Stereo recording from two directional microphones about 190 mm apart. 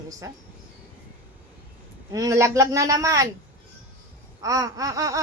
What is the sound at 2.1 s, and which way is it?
A woman's voice, 20° right (ahead or behind).